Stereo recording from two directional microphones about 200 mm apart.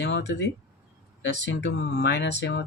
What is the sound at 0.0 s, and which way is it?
Speech, 60° left (ahead or behind).